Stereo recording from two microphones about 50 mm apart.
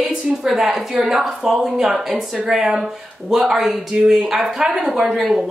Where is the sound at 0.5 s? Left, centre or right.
Centre.